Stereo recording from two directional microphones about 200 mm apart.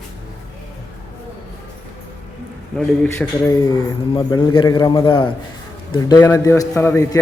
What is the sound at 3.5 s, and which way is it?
A man's voice, 20° left (ahead or behind).